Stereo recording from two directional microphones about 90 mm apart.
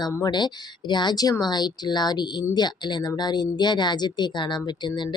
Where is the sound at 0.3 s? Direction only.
55° left (ahead or behind).